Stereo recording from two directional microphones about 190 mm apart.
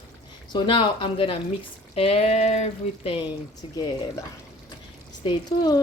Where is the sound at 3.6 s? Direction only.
25° left (ahead or behind).